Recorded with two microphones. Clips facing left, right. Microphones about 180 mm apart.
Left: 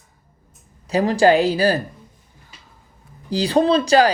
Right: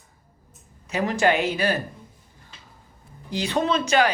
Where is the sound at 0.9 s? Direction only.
35° left (ahead or behind).